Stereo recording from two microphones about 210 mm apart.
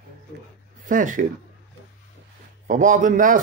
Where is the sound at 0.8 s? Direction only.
40° right (ahead or behind).